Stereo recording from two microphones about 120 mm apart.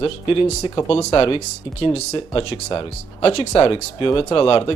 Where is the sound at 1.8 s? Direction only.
65° left (ahead or behind).